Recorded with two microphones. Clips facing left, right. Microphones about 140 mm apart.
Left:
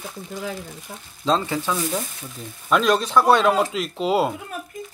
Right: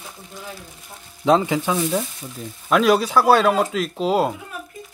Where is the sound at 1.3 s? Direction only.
15° right (ahead or behind).